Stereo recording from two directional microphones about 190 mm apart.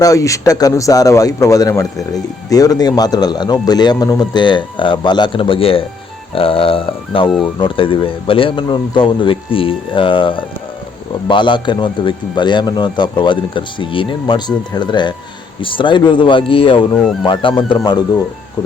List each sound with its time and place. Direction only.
0.0 s a man's voice: 15° left (ahead or behind)